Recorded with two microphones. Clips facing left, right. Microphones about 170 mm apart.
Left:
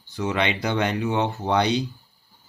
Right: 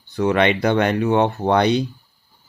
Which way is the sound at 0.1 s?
60° right (ahead or behind).